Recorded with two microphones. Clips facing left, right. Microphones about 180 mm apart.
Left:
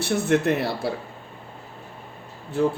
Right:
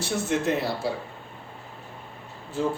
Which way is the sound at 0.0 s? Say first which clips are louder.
Left 5 dB; 60° left (ahead or behind).